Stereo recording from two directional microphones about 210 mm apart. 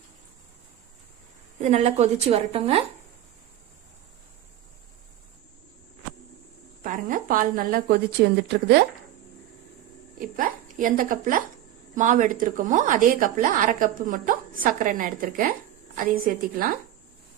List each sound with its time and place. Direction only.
1.5 s a woman's voice: 30° right (ahead or behind)
6.8 s a woman's voice: 40° right (ahead or behind)
10.2 s a woman's voice: 40° right (ahead or behind)